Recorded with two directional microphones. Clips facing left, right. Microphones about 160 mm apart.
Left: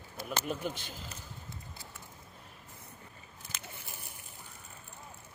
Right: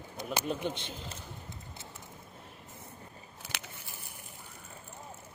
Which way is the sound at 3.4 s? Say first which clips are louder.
Right 5 dB; 80° right.